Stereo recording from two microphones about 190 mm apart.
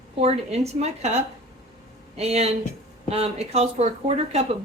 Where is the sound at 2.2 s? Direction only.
35° right (ahead or behind).